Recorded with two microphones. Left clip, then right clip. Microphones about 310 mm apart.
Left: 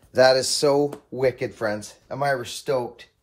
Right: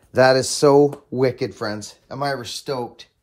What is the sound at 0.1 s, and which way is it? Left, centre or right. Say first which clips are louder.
A man's voice: right 2 dB; right.